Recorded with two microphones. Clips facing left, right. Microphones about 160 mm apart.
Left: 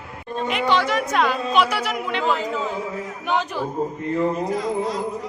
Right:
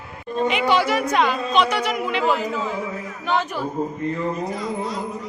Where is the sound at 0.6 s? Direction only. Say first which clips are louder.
Left 2 dB; 10° right (ahead or behind).